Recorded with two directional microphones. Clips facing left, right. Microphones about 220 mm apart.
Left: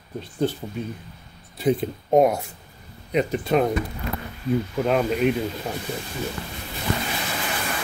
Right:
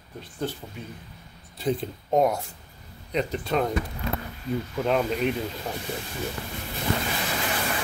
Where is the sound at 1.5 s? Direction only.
15° left (ahead or behind).